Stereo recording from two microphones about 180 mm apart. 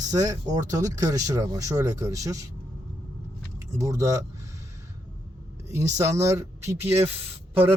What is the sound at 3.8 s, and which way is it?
Speech, 20° right (ahead or behind).